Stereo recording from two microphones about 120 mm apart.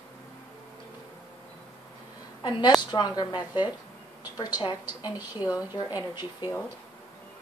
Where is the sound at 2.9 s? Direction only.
35° left (ahead or behind).